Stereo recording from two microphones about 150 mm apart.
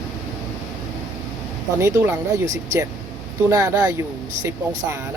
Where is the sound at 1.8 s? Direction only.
20° right (ahead or behind).